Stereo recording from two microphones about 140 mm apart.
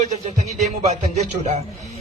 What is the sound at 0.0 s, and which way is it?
Speech, 55° right (ahead or behind).